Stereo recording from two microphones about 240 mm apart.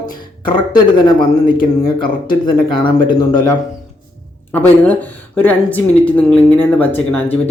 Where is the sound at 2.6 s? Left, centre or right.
Centre.